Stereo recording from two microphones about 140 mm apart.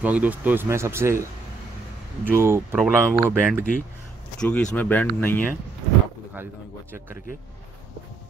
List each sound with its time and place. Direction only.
0.0 s speech: 10° right (ahead or behind)
2.2 s speech: 20° right (ahead or behind)
4.4 s speech: 5° left (ahead or behind)
6.3 s speech: 15° right (ahead or behind)